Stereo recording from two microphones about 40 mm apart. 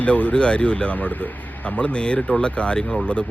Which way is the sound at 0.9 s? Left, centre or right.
Left.